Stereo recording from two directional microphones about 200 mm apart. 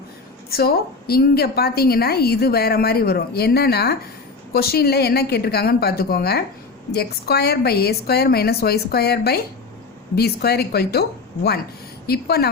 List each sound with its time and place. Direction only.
0.5 s a woman's voice: 50° left (ahead or behind)
12.0 s a woman's voice: 50° left (ahead or behind)